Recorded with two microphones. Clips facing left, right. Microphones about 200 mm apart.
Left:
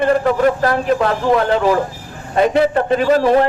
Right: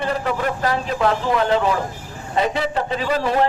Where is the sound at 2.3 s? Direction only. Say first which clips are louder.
Left 7 dB; 55° left (ahead or behind).